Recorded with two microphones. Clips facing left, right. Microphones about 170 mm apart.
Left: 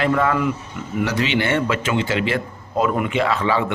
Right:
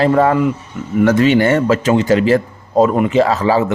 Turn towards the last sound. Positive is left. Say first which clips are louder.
# right 7 dB
turn(degrees=-40)  # may be behind; listen again after turning